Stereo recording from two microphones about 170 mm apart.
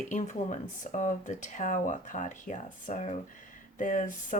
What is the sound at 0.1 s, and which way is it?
Speech, 45° left (ahead or behind).